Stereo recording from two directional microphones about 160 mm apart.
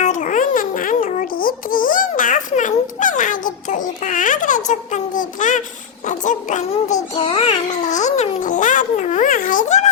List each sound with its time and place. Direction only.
0.0 s a sound: 50° left (ahead or behind)
6.1 s child singing: 50° left (ahead or behind)
7.1 s babbling: 35° left (ahead or behind)